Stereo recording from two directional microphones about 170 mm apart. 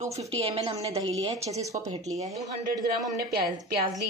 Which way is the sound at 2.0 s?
20° right (ahead or behind).